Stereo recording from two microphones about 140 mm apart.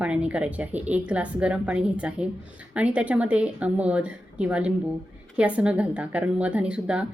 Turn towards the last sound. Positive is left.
turn(degrees=-10)  # may be behind; listen again after turning